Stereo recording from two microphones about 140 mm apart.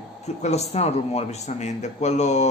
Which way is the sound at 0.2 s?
50° left (ahead or behind).